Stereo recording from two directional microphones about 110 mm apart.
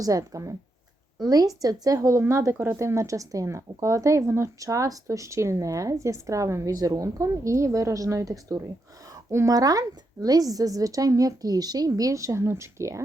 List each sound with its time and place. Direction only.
0.0 s a woman's voice: 30° right (ahead or behind)